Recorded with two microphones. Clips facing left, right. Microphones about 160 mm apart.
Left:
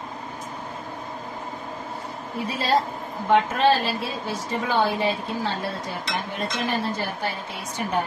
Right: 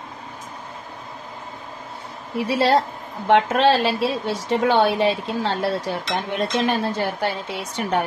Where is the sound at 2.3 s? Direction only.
80° right.